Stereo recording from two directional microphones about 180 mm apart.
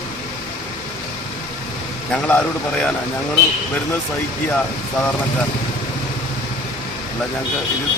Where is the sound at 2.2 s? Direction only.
5° left (ahead or behind).